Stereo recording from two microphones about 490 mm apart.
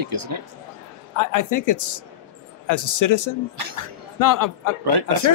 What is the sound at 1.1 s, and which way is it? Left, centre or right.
Speech, left.